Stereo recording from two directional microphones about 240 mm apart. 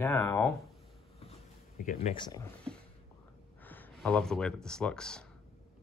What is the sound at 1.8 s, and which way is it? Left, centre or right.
Speech, left.